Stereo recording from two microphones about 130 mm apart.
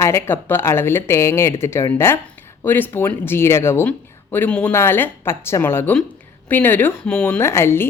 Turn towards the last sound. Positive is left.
turn(degrees=20)  # may be behind; listen again after turning